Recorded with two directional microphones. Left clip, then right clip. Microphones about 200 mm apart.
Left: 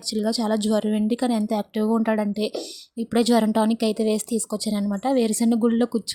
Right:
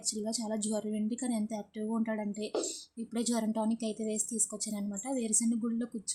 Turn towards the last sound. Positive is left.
turn(degrees=35)  # may be behind; listen again after turning